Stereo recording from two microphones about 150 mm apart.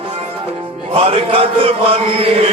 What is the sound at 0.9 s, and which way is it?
Music, 35° right (ahead or behind).